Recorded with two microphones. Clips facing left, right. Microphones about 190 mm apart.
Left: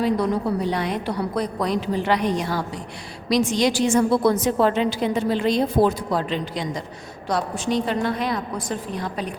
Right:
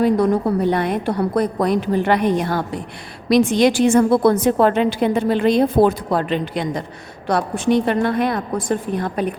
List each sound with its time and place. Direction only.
0.0 s a woman's voice: 50° right (ahead or behind)